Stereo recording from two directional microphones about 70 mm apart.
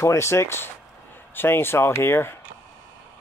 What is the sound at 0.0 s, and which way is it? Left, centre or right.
Speech, left.